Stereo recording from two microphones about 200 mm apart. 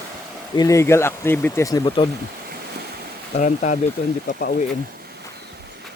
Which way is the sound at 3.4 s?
40° left (ahead or behind).